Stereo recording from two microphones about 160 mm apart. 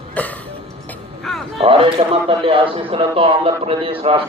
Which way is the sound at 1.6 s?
35° right (ahead or behind).